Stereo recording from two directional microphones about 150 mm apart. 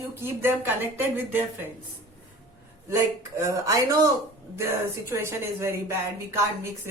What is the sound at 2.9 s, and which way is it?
A woman's voice, 20° right (ahead or behind).